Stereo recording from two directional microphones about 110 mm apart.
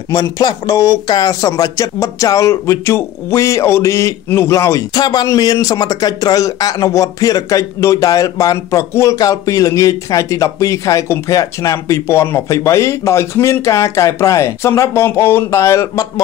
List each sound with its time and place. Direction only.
0.1 s speech: 35° left (ahead or behind)